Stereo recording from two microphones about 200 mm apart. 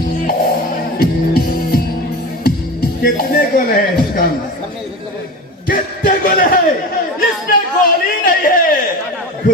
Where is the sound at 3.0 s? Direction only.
50° left (ahead or behind).